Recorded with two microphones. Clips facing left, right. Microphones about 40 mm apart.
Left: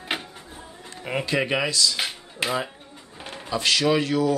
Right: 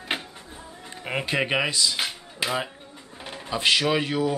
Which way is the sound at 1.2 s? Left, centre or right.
Centre.